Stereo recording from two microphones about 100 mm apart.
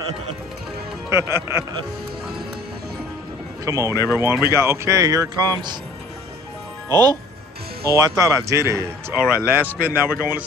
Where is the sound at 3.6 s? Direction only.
30° right (ahead or behind).